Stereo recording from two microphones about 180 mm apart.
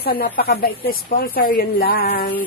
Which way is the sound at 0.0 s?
55° left (ahead or behind).